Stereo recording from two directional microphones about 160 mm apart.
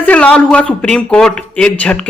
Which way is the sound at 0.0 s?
5° left (ahead or behind).